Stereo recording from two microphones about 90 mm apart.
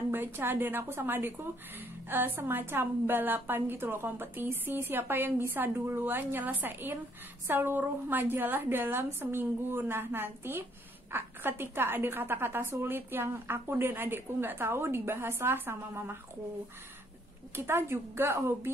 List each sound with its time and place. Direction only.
0.1 s a woman's voice: 25° right (ahead or behind)
17.6 s a woman's voice: 30° right (ahead or behind)